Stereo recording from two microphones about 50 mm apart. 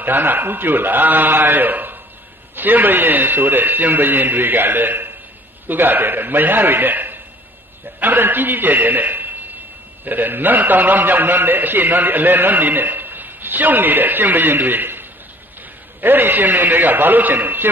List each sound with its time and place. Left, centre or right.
0.0 s a man's voice: right